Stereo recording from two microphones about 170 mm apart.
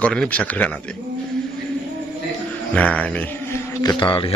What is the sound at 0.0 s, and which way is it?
Speech, 5° left (ahead or behind).